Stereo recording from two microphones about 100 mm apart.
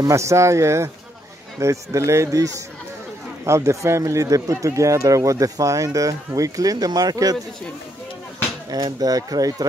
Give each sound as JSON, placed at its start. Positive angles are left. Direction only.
{"t": 0.0, "sound": "speech", "side_deg": -30}
{"t": 8.6, "sound": "speech", "side_deg": -40}